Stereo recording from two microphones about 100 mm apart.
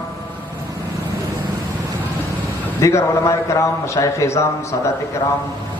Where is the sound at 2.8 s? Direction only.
30° left (ahead or behind).